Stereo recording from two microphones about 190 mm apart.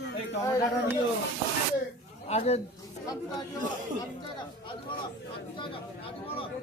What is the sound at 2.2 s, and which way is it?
Speech, 35° left (ahead or behind).